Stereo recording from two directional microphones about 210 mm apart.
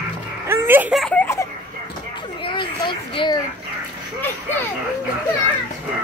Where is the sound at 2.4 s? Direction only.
25° left (ahead or behind).